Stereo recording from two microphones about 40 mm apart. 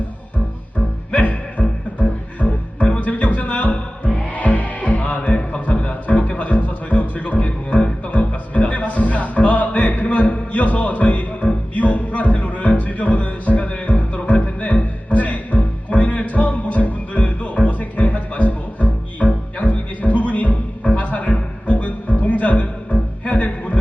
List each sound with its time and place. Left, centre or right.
1.1 s music: left
5.3 s a sound: left
5.5 s music: left